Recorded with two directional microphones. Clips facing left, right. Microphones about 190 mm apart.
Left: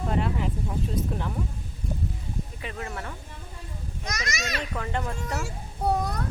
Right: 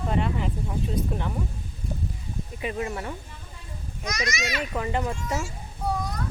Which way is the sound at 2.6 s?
15° right (ahead or behind).